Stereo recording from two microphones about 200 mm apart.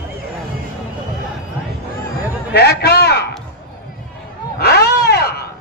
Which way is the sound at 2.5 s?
55° left (ahead or behind).